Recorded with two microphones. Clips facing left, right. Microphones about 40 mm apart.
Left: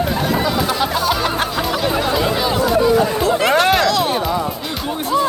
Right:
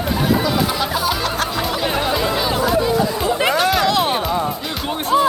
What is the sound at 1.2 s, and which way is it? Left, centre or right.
Music, left.